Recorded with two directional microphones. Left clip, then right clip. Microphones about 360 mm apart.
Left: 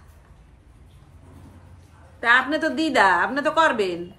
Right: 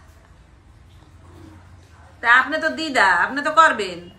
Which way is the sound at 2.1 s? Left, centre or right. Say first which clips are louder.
Right 3 dB; left.